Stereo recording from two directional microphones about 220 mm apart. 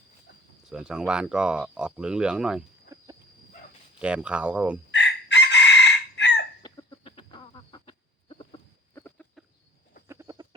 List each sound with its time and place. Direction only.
0.6 s speech: 5° right (ahead or behind)
2.9 s wild animals: 15° right (ahead or behind)
4.0 s speech: 5° right (ahead or behind)
4.9 s chicken: 55° left (ahead or behind)
6.6 s a sound: 20° left (ahead or behind)
9.0 s a sound: 5° left (ahead or behind)
10.1 s chicken: 15° right (ahead or behind)